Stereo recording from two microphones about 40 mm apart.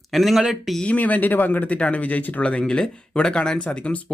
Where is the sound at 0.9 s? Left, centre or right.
Left.